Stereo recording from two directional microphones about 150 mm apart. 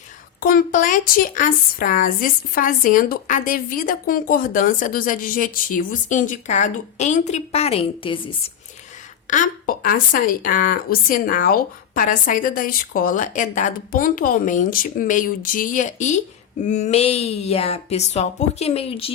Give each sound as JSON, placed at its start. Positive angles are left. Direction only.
{"t": 0.3, "sound": "a woman's voice", "side_deg": 70}
{"t": 9.3, "sound": "a woman's voice", "side_deg": 65}